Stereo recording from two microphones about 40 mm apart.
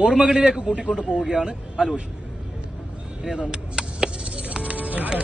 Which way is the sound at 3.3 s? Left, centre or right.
Right.